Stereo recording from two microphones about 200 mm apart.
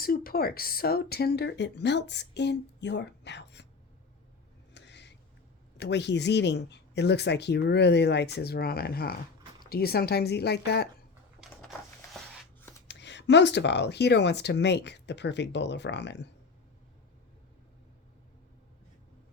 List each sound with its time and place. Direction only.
0.0 s speech: 45° left (ahead or behind)
4.7 s a sound: 60° left (ahead or behind)
5.7 s speech: 60° left (ahead or behind)
12.9 s speech: 60° left (ahead or behind)